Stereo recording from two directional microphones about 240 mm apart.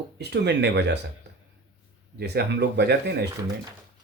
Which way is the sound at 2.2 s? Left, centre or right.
Right.